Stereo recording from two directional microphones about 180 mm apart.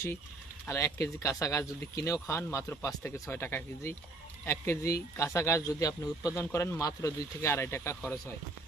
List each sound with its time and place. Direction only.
0.7 s speech: 15° left (ahead or behind)